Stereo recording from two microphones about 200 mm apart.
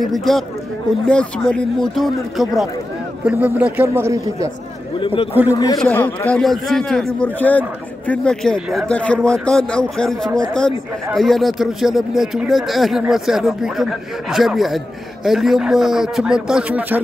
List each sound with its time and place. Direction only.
0.0 s a man's voice: centre (ahead or behind); by 4.5 s 15° right (ahead or behind)
5.0 s a man's voice: 25° left (ahead or behind); by 17.0 s 5° right (ahead or behind)